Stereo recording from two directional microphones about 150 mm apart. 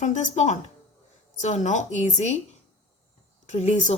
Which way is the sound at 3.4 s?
50° left (ahead or behind).